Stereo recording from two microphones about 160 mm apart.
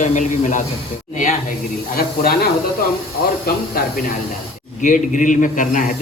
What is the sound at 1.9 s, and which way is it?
Speech, 65° left (ahead or behind).